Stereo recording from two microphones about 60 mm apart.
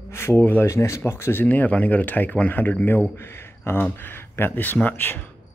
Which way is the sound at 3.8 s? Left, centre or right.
Left.